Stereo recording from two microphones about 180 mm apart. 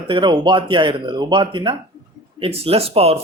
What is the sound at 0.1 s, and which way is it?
A man's voice, 25° right (ahead or behind).